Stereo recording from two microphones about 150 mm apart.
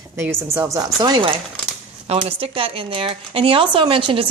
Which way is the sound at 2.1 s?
40° right (ahead or behind).